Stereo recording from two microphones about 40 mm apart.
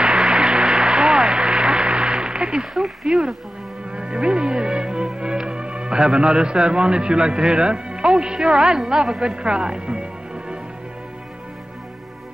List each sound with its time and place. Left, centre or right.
0.0 s a sound: right
2.7 s speech: centre
3.1 s a woman's voice: centre
3.9 s music: right
8.2 s a woman's voice: right
9.4 s music: right